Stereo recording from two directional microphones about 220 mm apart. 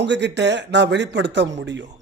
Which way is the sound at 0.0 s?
50° right (ahead or behind).